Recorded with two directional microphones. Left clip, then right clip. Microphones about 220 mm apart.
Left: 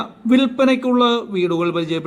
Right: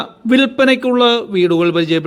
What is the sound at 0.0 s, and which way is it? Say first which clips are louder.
A man's voice: right 4 dB; 25° right (ahead or behind).